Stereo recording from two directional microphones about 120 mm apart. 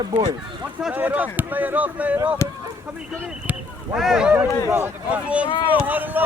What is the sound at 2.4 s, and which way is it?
Speech, 25° left (ahead or behind).